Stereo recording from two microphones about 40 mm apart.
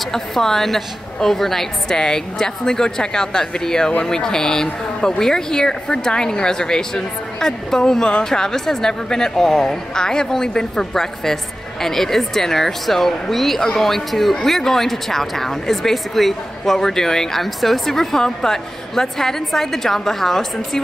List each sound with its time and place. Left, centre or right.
0.1 s speech: centre